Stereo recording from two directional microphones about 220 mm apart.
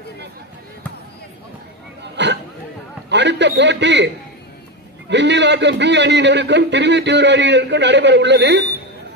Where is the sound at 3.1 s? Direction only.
50° right (ahead or behind).